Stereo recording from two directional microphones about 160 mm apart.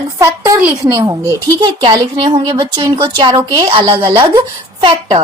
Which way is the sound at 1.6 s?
25° right (ahead or behind).